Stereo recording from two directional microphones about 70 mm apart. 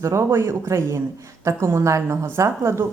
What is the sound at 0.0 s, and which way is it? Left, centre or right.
A man's voice, right.